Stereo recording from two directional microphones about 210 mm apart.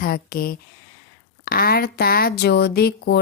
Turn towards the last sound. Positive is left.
turn(degrees=50)  # may be behind; listen again after turning